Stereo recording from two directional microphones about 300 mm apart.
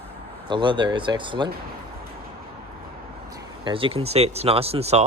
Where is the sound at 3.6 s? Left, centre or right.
Centre.